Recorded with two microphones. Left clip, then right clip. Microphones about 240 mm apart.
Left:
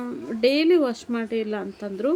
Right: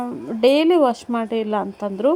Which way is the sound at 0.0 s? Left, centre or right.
Centre.